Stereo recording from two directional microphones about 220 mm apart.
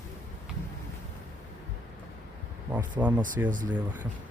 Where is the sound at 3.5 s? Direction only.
35° right (ahead or behind).